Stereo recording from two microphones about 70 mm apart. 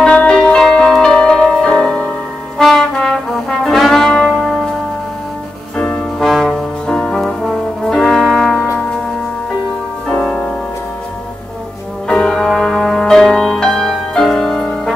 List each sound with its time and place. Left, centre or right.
0.0 s music: centre
2.6 s brass instrument: centre
5.8 s music: centre
6.1 s brass instrument: centre
10.1 s music: centre
12.1 s music: centre